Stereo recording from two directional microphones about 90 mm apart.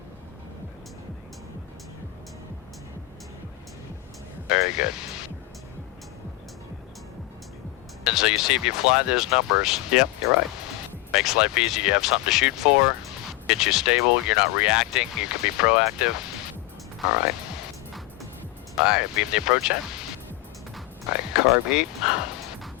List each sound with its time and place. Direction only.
4.4 s speech: 10° right (ahead or behind)
8.0 s speech: 5° right (ahead or behind)
11.1 s speech: 10° right (ahead or behind)
18.9 s speech: 10° right (ahead or behind)
21.1 s speech: 10° right (ahead or behind)